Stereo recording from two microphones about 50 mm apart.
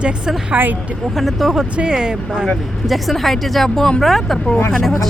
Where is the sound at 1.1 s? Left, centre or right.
Centre.